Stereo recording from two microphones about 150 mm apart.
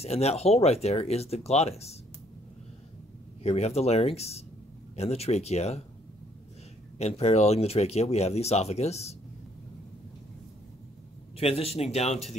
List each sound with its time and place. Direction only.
0.0 s speech: 45° left (ahead or behind)
3.4 s speech: 45° left (ahead or behind)
7.0 s speech: 45° left (ahead or behind)
11.3 s speech: 40° left (ahead or behind)